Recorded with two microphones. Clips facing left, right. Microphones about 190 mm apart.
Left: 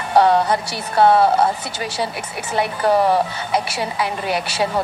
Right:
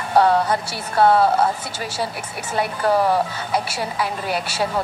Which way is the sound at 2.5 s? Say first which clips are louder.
Left 2 dB; 20° left (ahead or behind).